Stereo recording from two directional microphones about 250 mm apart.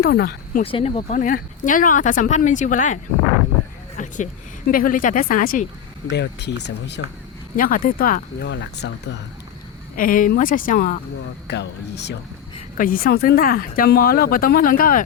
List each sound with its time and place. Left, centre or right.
0.0 s speech: left
0.6 s speech: left
3.9 s a sound: left
4.7 s speech: left
7.5 s speech: left
9.9 s speech: left
11.4 s speech: left